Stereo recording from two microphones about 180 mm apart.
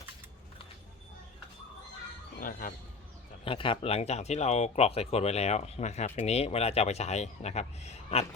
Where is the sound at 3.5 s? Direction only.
30° left (ahead or behind).